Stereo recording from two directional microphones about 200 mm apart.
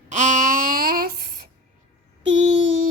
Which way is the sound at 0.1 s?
40° right (ahead or behind).